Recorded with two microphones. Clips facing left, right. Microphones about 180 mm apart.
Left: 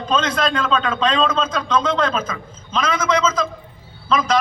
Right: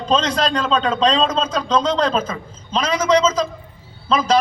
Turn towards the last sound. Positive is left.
turn(degrees=-30)  # may be behind; listen again after turning